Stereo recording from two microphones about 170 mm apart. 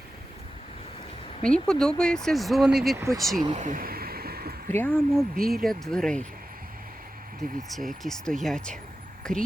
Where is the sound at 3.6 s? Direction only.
50° right (ahead or behind).